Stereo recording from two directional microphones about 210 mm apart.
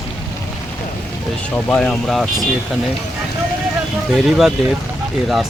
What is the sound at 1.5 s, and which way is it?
Speech, 5° left (ahead or behind).